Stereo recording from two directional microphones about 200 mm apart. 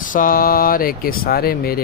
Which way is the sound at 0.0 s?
45° left (ahead or behind).